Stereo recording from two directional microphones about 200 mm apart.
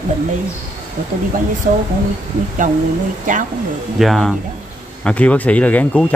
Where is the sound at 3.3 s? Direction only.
40° right (ahead or behind).